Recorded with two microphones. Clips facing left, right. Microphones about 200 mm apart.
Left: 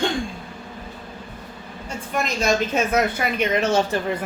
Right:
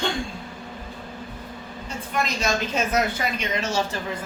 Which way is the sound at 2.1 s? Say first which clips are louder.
Left 4 dB; 45° left (ahead or behind).